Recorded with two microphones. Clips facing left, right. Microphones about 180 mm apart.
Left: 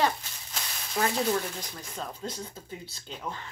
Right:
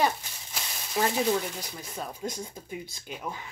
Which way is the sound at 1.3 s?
10° right (ahead or behind).